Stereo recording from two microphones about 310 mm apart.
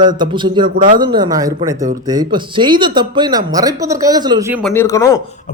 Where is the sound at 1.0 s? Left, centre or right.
Centre.